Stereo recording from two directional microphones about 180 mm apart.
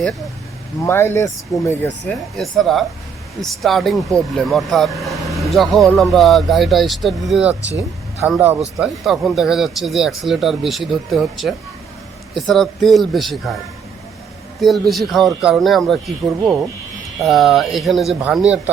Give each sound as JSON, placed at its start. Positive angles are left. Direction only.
{"t": 0.9, "sound": "speech", "side_deg": 15}
{"t": 2.0, "sound": "speech", "side_deg": 0}
{"t": 14.6, "sound": "speech", "side_deg": 0}